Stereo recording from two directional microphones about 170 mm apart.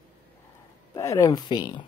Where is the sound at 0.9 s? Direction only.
20° left (ahead or behind).